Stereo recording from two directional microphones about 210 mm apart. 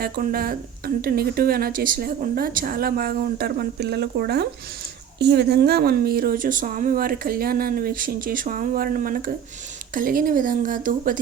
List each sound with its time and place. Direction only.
0.0 s speech: 45° right (ahead or behind)